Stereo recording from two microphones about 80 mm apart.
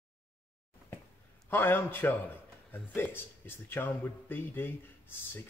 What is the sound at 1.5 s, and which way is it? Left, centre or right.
Speech, left.